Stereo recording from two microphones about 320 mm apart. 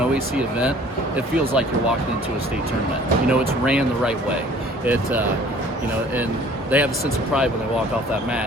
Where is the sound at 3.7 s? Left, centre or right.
Centre.